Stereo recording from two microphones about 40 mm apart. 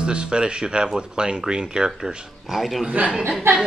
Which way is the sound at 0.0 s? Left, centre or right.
Right.